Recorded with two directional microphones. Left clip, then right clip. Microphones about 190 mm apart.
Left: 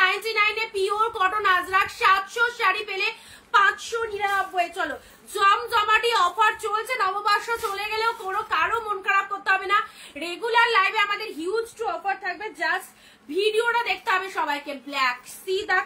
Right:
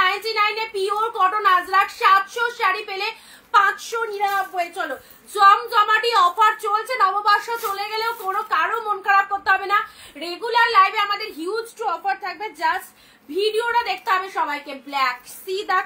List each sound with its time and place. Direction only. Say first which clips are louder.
0.0 s a sound: right 2 dB; 15° left (ahead or behind)
1.7 s speech: right 4 dB; 15° left (ahead or behind)
4.7 s speech: right 1 dB; 15° left (ahead or behind)